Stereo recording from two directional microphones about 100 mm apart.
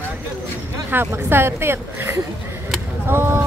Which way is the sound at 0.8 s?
20° right (ahead or behind).